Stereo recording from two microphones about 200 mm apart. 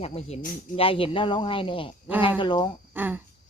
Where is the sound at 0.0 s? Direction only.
30° left (ahead or behind).